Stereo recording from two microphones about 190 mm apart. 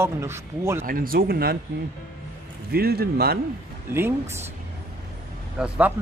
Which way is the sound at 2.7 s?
55° right (ahead or behind).